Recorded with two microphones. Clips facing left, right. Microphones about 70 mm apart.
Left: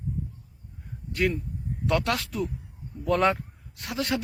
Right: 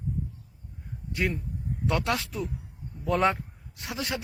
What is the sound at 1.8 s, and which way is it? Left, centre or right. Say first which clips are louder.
Speech: left 2 dB; centre.